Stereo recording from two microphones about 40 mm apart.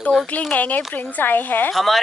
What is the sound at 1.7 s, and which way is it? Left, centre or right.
Speech, centre.